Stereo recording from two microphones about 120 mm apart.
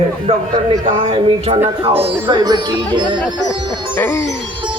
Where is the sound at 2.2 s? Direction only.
35° right (ahead or behind).